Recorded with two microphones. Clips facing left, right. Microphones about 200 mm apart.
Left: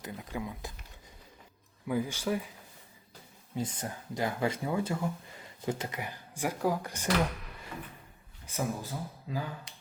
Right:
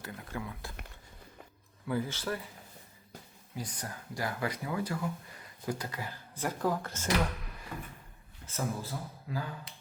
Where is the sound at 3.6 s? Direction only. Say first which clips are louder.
Left 5 dB; 25° left (ahead or behind).